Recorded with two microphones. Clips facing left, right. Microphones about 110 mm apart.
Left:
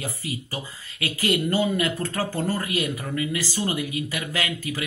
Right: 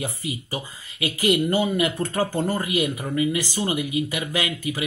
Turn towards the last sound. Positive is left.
turn(degrees=-15)  # may be behind; listen again after turning